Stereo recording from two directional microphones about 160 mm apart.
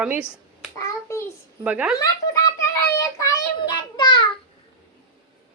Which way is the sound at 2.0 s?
20° left (ahead or behind).